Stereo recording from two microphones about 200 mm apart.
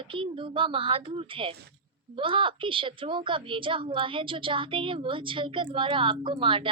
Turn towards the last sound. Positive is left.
turn(degrees=-25)  # may be behind; listen again after turning